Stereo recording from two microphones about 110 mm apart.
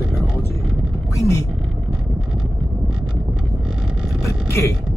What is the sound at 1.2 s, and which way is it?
Speech, 30° left (ahead or behind).